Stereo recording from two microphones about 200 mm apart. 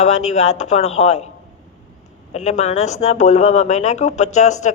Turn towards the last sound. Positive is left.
turn(degrees=35)  # may be behind; listen again after turning